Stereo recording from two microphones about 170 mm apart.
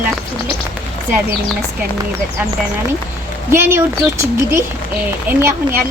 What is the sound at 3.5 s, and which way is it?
Speech, 15° right (ahead or behind).